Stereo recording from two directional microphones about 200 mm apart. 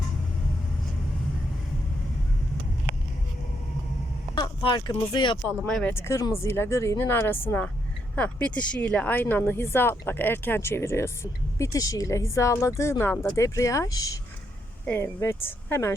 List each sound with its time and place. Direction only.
4.4 s speech: 25° left (ahead or behind)
5.6 s speech: 5° left (ahead or behind)